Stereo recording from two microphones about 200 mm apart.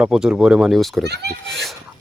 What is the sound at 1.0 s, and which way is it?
Speech, 55° right (ahead or behind).